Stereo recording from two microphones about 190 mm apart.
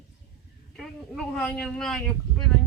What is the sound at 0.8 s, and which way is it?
Speech, centre (ahead or behind).